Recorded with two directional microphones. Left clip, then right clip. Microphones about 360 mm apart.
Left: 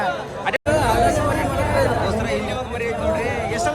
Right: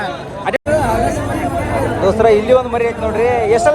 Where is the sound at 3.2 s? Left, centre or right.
Left.